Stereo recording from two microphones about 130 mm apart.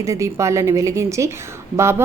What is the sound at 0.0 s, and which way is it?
A woman's voice, 25° right (ahead or behind).